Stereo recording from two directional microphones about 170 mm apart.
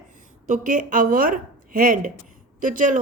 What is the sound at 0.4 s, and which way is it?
A woman's voice, 50° right (ahead or behind).